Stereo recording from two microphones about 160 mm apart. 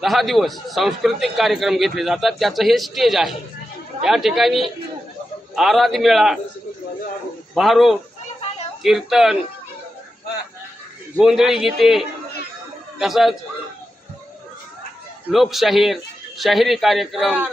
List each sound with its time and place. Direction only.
0.0 s a man's voice: centre (ahead or behind)
7.5 s a man's voice: centre (ahead or behind)
11.2 s a man's voice: 5° right (ahead or behind)
15.3 s a man's voice: centre (ahead or behind)